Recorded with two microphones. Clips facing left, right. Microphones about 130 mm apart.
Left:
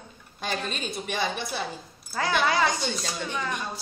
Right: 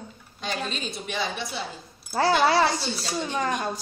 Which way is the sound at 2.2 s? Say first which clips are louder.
Right 4 dB; 35° right (ahead or behind).